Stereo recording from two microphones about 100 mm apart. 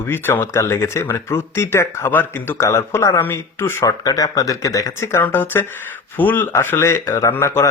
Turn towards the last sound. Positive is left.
turn(degrees=25)  # may be behind; listen again after turning